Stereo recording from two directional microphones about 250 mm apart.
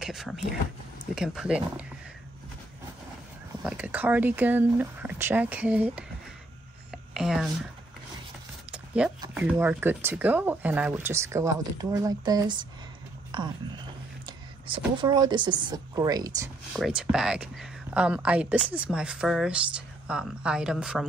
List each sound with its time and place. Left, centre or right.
0.0 s speech: centre
3.6 s speech: centre
7.2 s speech: centre
8.7 s a sound: centre
9.3 s speech: centre
16.7 s speech: centre